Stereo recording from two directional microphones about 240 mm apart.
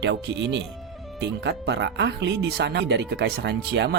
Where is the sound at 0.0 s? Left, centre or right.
Right.